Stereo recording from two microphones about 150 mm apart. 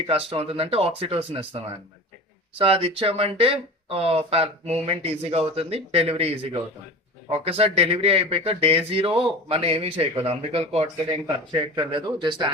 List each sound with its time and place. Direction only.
0.1 s speech: 40° right (ahead or behind)
2.6 s speech: 40° right (ahead or behind)